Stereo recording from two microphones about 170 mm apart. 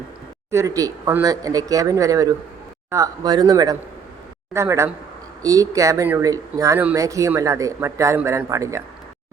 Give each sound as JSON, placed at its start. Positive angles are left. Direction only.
{"t": 0.5, "sound": "speech", "side_deg": -20}